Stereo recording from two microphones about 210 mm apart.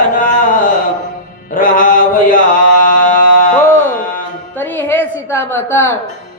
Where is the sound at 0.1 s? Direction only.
40° left (ahead or behind).